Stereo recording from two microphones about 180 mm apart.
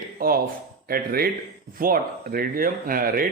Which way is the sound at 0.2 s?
55° right (ahead or behind).